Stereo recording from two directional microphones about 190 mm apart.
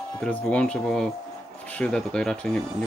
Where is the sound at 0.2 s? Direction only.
5° left (ahead or behind).